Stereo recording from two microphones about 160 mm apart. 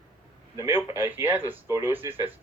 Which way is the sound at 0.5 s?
15° right (ahead or behind).